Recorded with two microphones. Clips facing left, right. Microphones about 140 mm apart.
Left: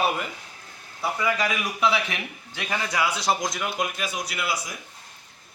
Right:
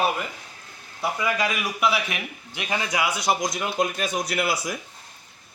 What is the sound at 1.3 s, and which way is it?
A man's voice, 10° right (ahead or behind).